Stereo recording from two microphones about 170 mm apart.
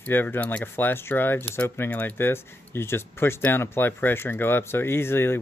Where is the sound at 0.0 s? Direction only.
10° left (ahead or behind).